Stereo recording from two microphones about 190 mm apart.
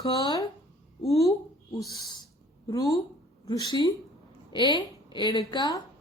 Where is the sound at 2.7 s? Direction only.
15° left (ahead or behind).